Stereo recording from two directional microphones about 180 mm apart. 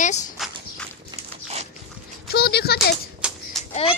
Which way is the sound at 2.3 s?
65° left (ahead or behind).